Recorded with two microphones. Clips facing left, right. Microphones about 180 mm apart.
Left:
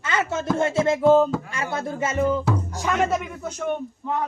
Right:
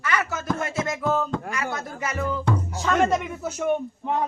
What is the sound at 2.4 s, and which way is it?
Music, 5° left (ahead or behind).